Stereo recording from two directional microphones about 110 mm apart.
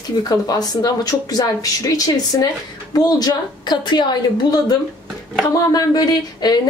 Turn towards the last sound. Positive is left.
turn(degrees=35)  # may be behind; listen again after turning